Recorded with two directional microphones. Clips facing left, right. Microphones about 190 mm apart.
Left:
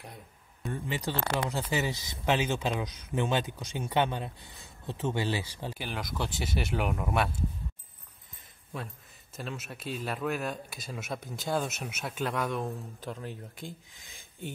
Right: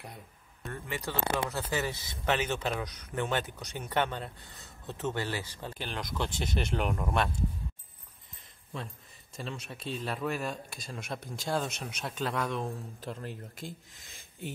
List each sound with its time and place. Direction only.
0.7 s a man's voice: 20° left (ahead or behind)
9.4 s speech: centre (ahead or behind)